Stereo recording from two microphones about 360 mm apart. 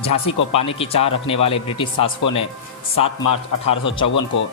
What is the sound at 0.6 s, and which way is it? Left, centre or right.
Speech, centre.